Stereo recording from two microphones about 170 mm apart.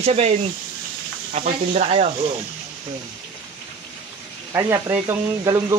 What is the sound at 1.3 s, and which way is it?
Speech, 40° right (ahead or behind).